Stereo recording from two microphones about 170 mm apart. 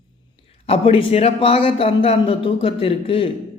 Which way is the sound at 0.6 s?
35° left (ahead or behind).